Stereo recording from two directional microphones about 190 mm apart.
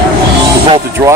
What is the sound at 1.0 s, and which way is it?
Speech, 25° right (ahead or behind).